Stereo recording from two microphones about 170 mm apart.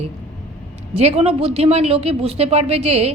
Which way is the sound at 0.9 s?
40° right (ahead or behind).